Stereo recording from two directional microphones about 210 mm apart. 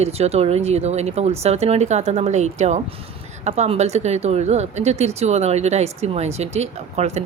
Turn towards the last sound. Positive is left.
turn(degrees=-30)  # may be behind; listen again after turning